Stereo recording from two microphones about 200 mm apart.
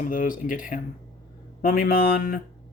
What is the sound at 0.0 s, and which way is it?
Speech, 40° left (ahead or behind).